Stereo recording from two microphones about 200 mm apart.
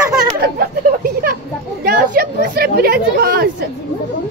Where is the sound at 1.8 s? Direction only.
45° right (ahead or behind).